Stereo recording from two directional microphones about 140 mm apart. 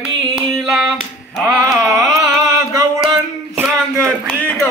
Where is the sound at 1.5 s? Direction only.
25° right (ahead or behind).